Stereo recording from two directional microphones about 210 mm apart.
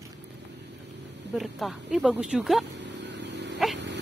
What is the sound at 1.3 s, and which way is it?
Speech, centre (ahead or behind).